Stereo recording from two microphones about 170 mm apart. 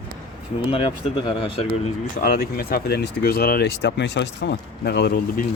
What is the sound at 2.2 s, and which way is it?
Speech, 60° left (ahead or behind).